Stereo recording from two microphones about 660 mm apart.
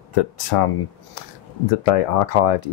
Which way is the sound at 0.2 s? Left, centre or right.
Left.